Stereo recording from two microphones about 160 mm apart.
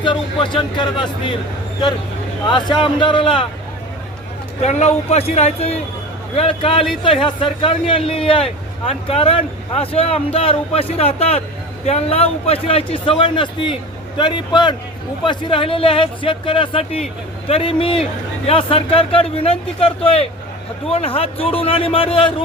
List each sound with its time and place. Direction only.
0.0 s a man's voice: 30° left (ahead or behind)
2.5 s a man's voice: 30° left (ahead or behind)
4.6 s a man's voice: 45° left (ahead or behind)